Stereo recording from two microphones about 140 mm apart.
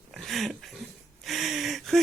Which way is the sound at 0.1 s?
Centre (ahead or behind).